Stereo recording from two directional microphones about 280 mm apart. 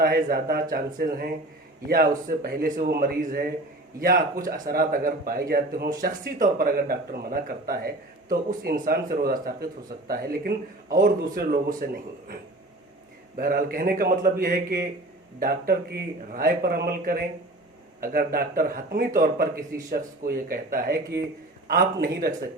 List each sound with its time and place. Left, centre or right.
0.0 s a man's voice: right
13.3 s a man's voice: right